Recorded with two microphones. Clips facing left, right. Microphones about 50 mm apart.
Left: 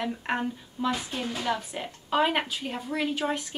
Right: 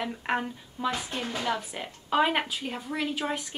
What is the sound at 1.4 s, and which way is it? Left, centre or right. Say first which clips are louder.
Speech: left 1 dB; centre.